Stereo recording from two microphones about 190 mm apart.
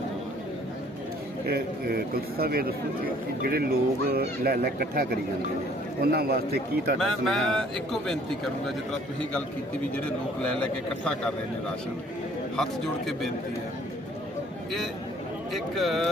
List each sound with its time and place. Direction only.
1.5 s a man's voice: 55° right (ahead or behind)
7.0 s speech: centre (ahead or behind)
10.4 s a man's voice: 5° left (ahead or behind)
15.5 s speech: centre (ahead or behind)